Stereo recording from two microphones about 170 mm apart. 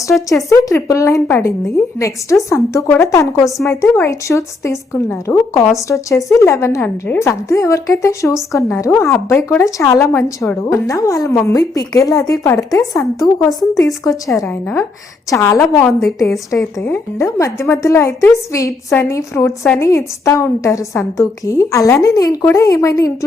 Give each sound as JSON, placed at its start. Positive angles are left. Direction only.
{"t": 0.1, "sound": "a woman's voice", "side_deg": 5}
{"t": 0.5, "sound": "a woman's voice", "side_deg": 20}
{"t": 15.7, "sound": "a woman's voice", "side_deg": 0}
{"t": 16.5, "sound": "a woman's voice", "side_deg": 15}